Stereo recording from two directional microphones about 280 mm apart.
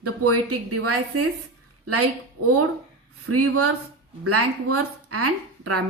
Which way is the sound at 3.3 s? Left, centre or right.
Right.